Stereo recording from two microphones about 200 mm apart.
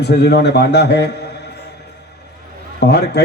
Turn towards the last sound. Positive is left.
turn(degrees=55)  # may be behind; listen again after turning